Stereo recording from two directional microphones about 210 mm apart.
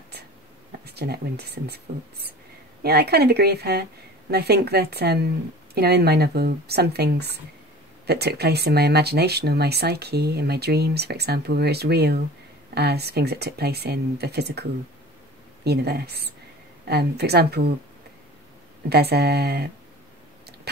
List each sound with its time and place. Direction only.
0.8 s speech: 50° right (ahead or behind)
18.9 s speech: 50° right (ahead or behind)
20.7 s a sound: 50° right (ahead or behind)